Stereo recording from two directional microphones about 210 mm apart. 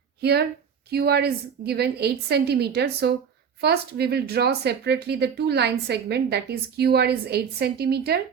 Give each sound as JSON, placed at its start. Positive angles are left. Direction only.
{"t": 0.2, "sound": "a woman's voice", "side_deg": -50}